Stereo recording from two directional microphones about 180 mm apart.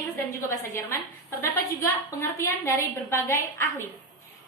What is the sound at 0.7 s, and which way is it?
A woman's voice, 15° left (ahead or behind).